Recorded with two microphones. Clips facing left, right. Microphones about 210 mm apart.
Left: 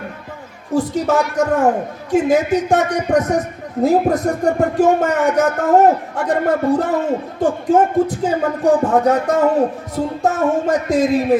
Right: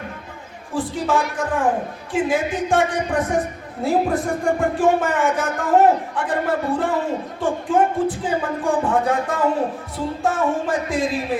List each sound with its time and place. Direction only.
0.7 s a man's voice: 40° left (ahead or behind)